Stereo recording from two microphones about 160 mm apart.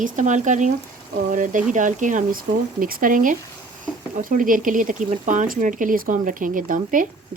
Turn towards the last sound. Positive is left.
turn(degrees=-55)  # may be behind; listen again after turning